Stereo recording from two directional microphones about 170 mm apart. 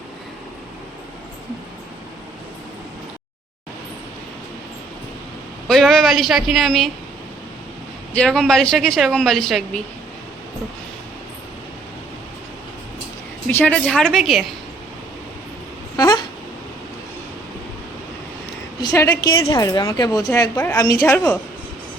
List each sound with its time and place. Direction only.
5.6 s speech: centre (ahead or behind)
8.1 s speech: 5° left (ahead or behind)
13.5 s speech: 10° left (ahead or behind)
16.0 s a sound: 25° left (ahead or behind)
18.8 s a woman's voice: 25° left (ahead or behind)